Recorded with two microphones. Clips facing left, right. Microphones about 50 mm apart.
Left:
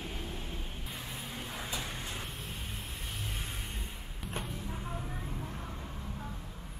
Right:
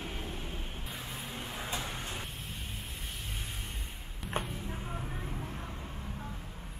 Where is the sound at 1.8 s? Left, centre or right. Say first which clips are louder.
Right 1 dB; right.